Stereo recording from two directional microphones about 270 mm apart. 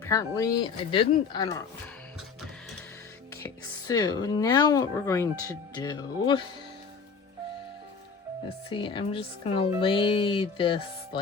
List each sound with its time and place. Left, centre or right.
0.0 s speech: centre
3.4 s speech: centre
8.7 s speech: centre